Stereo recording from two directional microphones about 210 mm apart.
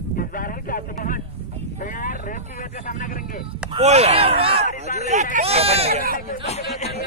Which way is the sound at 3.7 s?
30° right (ahead or behind).